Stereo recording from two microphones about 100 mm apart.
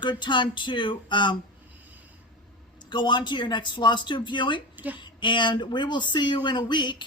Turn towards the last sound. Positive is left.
turn(degrees=50)  # may be behind; listen again after turning